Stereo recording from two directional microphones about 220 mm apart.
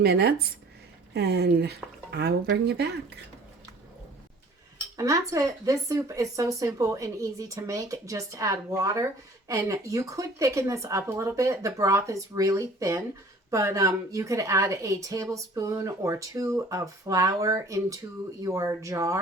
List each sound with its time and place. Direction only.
0.0 s speech: 50° right (ahead or behind)
4.9 s a woman's voice: 15° right (ahead or behind)